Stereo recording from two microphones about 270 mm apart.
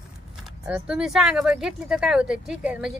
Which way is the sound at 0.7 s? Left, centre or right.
Centre.